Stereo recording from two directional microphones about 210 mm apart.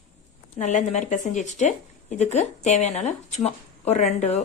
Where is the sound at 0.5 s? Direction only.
35° left (ahead or behind).